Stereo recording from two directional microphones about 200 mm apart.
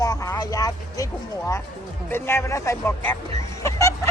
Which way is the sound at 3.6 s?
15° left (ahead or behind).